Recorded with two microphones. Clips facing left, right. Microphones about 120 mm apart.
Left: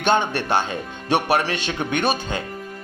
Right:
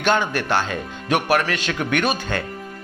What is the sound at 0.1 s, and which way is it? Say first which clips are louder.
Speech: left 1 dB; 25° left (ahead or behind).